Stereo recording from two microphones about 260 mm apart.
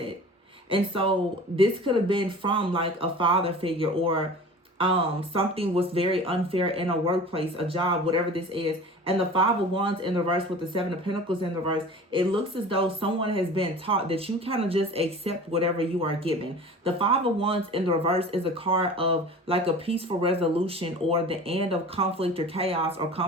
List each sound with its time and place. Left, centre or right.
0.7 s speech: centre